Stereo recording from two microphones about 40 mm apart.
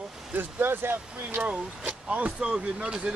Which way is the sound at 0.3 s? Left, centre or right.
Right.